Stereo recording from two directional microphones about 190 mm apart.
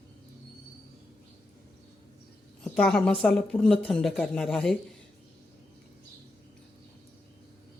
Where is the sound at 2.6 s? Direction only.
5° left (ahead or behind).